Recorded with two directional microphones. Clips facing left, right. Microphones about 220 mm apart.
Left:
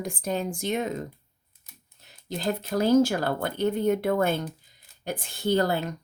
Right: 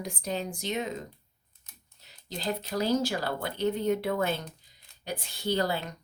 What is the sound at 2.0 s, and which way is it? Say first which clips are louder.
Speech: left 5 dB; 50° left (ahead or behind).